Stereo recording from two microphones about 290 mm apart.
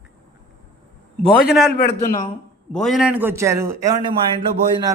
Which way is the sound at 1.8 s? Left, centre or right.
Left.